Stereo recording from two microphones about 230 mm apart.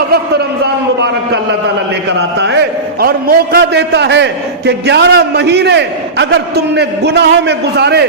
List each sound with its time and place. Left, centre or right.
2.4 s a man's voice: right